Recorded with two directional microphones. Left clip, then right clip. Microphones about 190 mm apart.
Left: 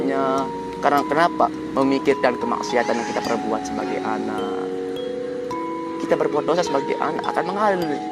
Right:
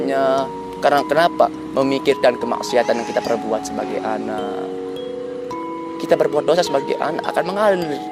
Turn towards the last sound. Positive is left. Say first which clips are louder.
# right 3 dB
turn(degrees=-40)  # may be behind; listen again after turning